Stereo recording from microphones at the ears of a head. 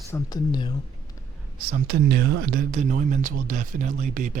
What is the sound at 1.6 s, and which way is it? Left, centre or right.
Speech, right.